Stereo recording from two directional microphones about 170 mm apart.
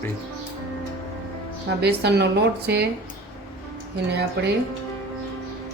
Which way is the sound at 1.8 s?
75° right (ahead or behind).